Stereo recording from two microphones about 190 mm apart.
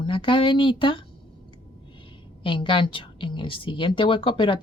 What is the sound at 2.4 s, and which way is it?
A woman's voice, 25° left (ahead or behind).